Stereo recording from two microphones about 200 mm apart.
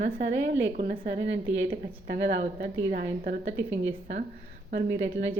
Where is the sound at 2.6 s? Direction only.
40° right (ahead or behind).